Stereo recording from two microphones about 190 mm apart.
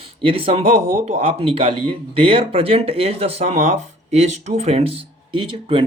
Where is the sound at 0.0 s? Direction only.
30° right (ahead or behind).